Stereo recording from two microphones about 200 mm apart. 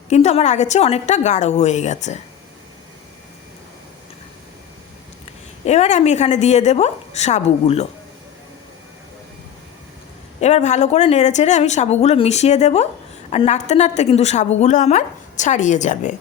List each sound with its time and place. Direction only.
0.1 s a woman's voice: 35° left (ahead or behind)
5.6 s a woman's voice: 35° left (ahead or behind)
10.4 s a woman's voice: 35° left (ahead or behind)